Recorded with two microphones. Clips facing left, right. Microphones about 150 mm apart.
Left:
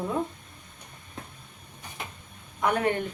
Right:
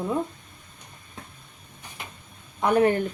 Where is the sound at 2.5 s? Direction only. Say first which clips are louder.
Right 5 dB; 30° right (ahead or behind).